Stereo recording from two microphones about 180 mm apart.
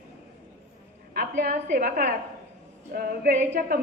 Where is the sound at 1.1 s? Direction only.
50° right (ahead or behind).